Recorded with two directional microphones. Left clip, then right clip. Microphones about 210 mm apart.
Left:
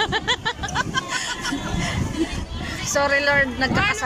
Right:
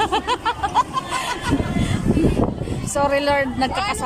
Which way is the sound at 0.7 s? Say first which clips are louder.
Right 3 dB; 20° right (ahead or behind).